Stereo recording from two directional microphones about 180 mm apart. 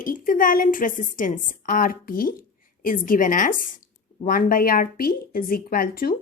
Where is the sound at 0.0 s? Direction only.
50° left (ahead or behind).